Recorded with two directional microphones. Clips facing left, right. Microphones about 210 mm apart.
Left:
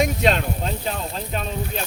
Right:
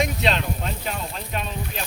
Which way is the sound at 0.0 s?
45° left (ahead or behind).